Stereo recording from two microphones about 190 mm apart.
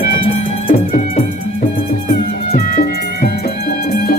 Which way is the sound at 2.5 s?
50° left (ahead or behind).